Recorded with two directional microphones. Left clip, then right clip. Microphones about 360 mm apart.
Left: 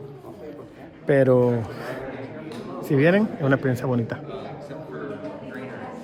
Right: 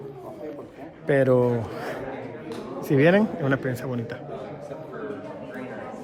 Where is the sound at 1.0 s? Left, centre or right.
Centre.